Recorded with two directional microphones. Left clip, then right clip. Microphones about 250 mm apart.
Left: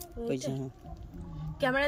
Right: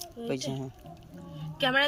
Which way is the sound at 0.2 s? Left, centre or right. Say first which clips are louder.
Even; centre.